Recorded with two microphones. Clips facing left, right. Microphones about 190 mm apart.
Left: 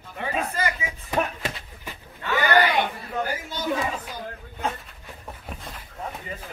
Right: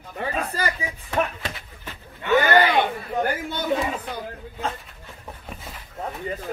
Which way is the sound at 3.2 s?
55° right (ahead or behind).